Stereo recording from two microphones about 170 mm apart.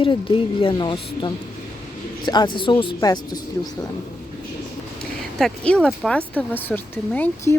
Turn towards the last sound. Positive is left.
turn(degrees=10)  # may be behind; listen again after turning